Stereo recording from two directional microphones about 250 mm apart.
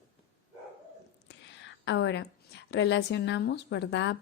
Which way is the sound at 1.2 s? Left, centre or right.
Left.